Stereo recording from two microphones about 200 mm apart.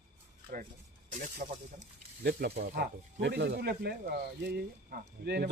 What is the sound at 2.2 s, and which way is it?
Speech, 50° right (ahead or behind).